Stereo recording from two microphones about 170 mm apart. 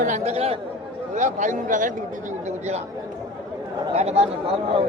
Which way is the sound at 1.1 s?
45° right (ahead or behind).